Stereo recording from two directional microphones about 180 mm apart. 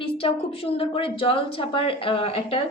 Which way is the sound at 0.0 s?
30° left (ahead or behind).